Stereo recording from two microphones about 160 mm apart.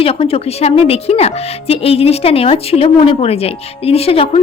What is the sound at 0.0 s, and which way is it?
Speech, 35° left (ahead or behind).